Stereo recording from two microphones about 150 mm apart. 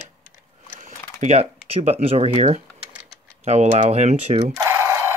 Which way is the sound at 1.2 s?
45° right (ahead or behind).